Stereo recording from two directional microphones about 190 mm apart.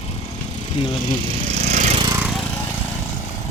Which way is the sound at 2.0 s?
20° right (ahead or behind).